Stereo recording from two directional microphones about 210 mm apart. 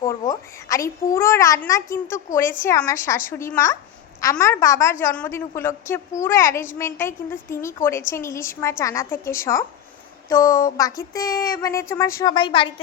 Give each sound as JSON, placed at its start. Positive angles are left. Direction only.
{"t": 0.0, "sound": "a child's voice", "side_deg": 15}